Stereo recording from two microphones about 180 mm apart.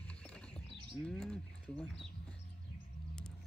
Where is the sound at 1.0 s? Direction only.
5° left (ahead or behind).